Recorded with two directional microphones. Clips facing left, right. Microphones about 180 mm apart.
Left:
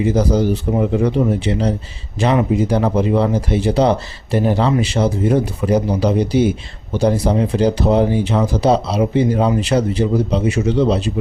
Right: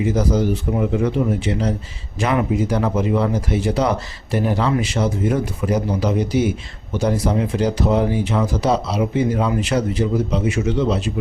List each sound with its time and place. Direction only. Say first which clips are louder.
0.0 s speech: left 3 dB; 30° left (ahead or behind)